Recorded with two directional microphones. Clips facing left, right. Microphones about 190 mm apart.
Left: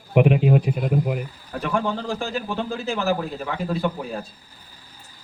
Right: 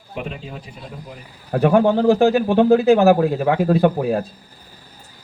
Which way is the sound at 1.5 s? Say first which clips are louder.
Right 10 dB; 60° right (ahead or behind).